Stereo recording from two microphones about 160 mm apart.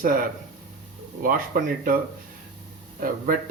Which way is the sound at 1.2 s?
60° right (ahead or behind).